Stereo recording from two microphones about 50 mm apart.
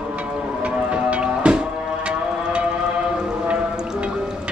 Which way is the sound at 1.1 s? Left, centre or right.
Right.